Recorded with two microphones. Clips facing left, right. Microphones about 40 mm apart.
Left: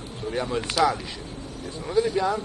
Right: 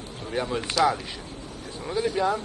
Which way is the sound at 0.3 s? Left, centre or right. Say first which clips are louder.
Left 1 dB; centre.